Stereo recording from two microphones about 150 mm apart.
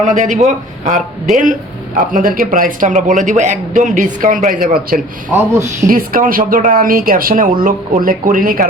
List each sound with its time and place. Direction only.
0.0 s speech: 55° right (ahead or behind)
2.1 s speech: 70° right (ahead or behind)
5.3 s speech: 20° right (ahead or behind)
5.9 s speech: 70° right (ahead or behind)